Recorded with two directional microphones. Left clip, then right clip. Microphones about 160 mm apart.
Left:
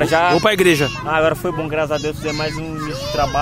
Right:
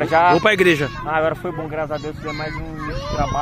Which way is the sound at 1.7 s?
35° left (ahead or behind).